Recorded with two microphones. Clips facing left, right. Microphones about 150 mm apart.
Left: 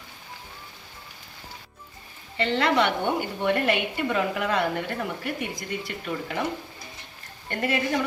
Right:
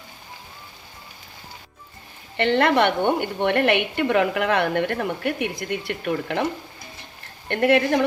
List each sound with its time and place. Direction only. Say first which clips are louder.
2.3 s a woman's voice: right 4 dB; 65° right (ahead or behind)
7.4 s a woman's voice: right 8 dB; 65° right (ahead or behind)